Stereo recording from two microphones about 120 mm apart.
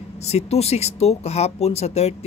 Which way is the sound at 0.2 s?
60° left (ahead or behind).